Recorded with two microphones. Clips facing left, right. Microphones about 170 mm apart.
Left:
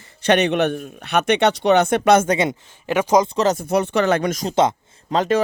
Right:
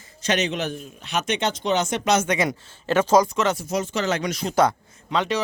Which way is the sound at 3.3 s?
40° left (ahead or behind).